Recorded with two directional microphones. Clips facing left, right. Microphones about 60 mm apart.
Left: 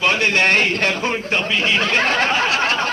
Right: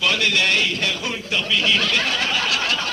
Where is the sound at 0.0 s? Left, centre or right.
Left.